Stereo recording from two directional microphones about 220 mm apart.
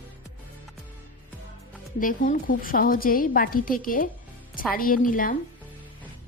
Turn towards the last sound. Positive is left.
turn(degrees=40)  # may be behind; listen again after turning